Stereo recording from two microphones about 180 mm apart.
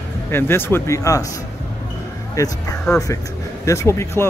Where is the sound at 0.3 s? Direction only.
10° left (ahead or behind).